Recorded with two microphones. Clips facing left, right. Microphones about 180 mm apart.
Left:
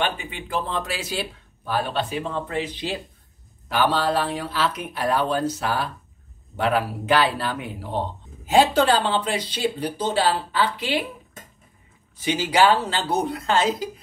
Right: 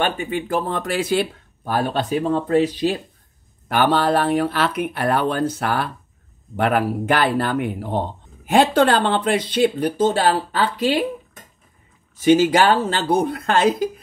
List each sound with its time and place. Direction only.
0.0 s speech: 45° right (ahead or behind)
3.6 s speech: 55° right (ahead or behind)
12.2 s speech: 45° right (ahead or behind)